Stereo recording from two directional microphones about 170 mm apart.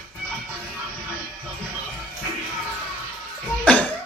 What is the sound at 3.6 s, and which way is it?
Music, 10° left (ahead or behind).